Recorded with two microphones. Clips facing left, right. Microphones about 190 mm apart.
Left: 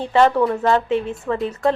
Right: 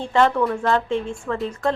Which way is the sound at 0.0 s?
15° left (ahead or behind).